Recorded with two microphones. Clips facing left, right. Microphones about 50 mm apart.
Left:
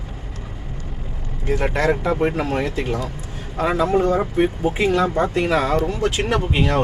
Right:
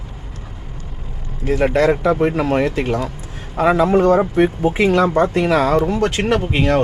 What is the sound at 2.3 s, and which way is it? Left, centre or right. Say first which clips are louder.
Speech: right 5 dB; right.